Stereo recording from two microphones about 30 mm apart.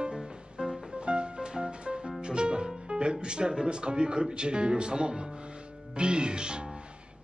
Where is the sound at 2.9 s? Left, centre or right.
Right.